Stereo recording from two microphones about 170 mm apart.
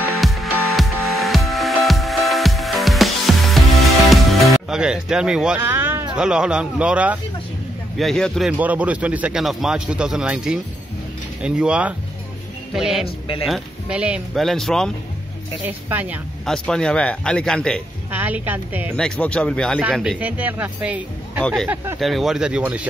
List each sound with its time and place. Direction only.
0.1 s music: centre (ahead or behind)
6.1 s speech: 5° right (ahead or behind)
13.0 s speech: 35° left (ahead or behind)
13.5 s speech: 5° right (ahead or behind)
15.6 s speech: 10° right (ahead or behind)
16.4 s speech: 5° left (ahead or behind)
18.1 s speech: 10° right (ahead or behind)
18.9 s speech: 5° left (ahead or behind)
19.8 s speech: 5° right (ahead or behind)